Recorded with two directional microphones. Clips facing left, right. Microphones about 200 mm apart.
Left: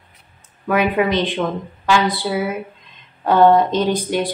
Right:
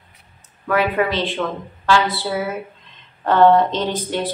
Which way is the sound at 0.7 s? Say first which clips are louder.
Left 2 dB; 15° left (ahead or behind).